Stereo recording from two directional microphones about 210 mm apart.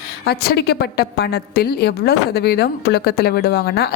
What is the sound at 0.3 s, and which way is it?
A woman's voice, 50° left (ahead or behind).